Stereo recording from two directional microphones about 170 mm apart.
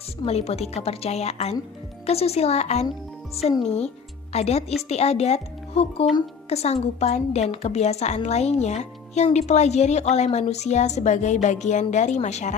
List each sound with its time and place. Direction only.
0.3 s a woman's voice: 40° left (ahead or behind)
4.3 s a woman's voice: 40° left (ahead or behind)